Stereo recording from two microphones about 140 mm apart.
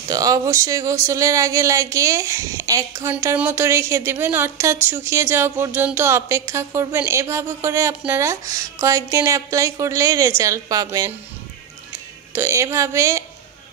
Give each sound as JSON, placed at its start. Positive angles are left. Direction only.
{"t": 0.1, "sound": "speech", "side_deg": -25}
{"t": 12.3, "sound": "speech", "side_deg": -20}